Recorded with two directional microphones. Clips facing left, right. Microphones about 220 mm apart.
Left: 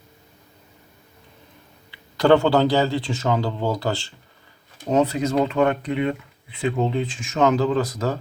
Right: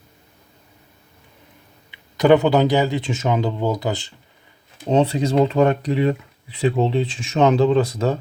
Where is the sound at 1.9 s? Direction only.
20° right (ahead or behind).